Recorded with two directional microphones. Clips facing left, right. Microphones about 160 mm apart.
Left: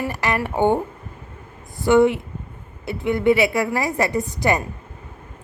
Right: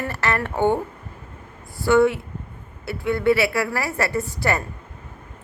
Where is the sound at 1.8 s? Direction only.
20° left (ahead or behind).